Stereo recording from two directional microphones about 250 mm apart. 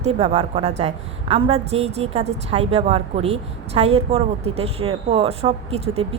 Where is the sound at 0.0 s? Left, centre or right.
Right.